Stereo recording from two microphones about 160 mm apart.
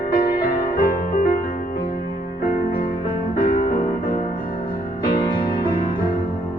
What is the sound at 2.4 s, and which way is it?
Music, 65° left (ahead or behind).